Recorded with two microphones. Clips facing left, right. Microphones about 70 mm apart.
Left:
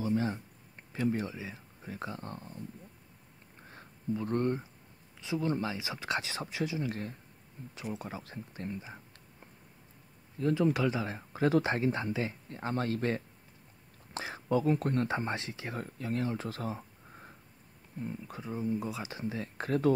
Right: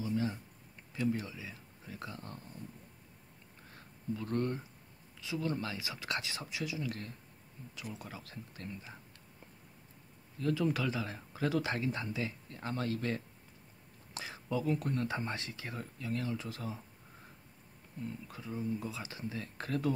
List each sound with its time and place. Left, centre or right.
0.0 s a sound: left
3.7 s speech: left
10.4 s speech: left
14.1 s whispering: left
14.5 s speech: left
15.0 s speech: left
15.7 s speech: left
18.0 s speech: left